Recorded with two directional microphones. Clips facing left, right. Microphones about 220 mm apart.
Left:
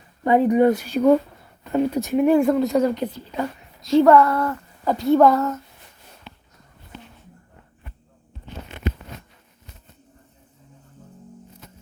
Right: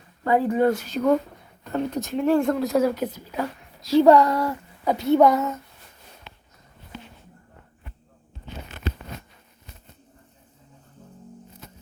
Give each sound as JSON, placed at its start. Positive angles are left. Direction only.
{"t": 0.3, "sound": "speech", "side_deg": 20}
{"t": 2.4, "sound": "a woman's voice", "side_deg": 0}
{"t": 4.0, "sound": "speech", "side_deg": -15}
{"t": 5.2, "sound": "a woman's voice", "side_deg": 0}